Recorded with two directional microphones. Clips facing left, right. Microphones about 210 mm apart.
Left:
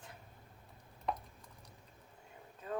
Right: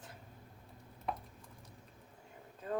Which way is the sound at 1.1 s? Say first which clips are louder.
Left 1 dB; 5° right (ahead or behind).